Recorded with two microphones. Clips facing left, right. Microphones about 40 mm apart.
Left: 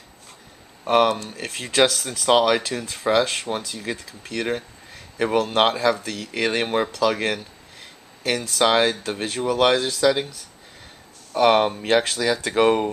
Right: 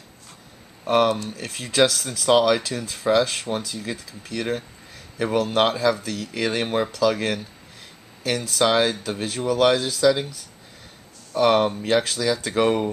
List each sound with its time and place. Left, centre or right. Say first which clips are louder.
0.8 s speech: left 1 dB; centre
8.5 s speech: left 1 dB; centre
11.3 s speech: left 1 dB; centre